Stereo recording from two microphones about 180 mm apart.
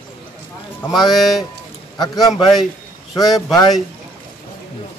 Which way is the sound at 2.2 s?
Centre (ahead or behind).